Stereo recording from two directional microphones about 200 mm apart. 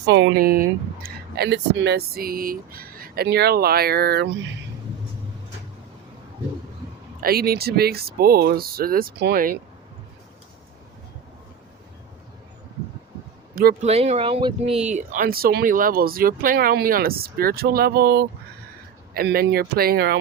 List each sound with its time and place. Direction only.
0.0 s speech: 60° right (ahead or behind)
7.2 s speech: 50° right (ahead or behind)
13.8 s speech: 30° right (ahead or behind); by 20.1 s 50° right (ahead or behind)